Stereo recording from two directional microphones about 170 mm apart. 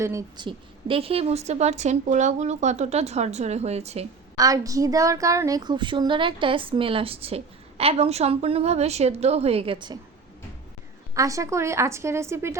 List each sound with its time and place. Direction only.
0.0 s a woman's voice: 15° right (ahead or behind); by 4.0 s 40° right (ahead or behind)
4.4 s a woman's voice: 20° right (ahead or behind)
11.1 s a woman's voice: 20° right (ahead or behind)